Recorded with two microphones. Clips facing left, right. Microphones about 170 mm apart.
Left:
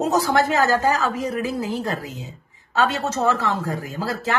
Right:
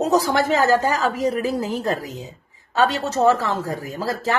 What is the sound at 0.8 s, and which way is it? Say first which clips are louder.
Speech: right 1 dB; 35° right (ahead or behind).